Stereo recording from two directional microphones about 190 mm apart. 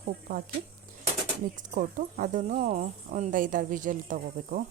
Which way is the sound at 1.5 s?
40° right (ahead or behind).